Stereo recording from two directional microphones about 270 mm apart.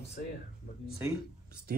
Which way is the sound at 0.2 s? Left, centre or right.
Left.